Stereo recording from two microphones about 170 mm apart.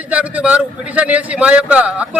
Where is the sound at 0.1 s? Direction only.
5° right (ahead or behind).